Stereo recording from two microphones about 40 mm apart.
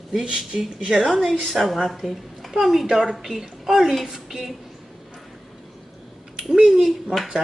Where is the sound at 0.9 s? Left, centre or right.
Centre.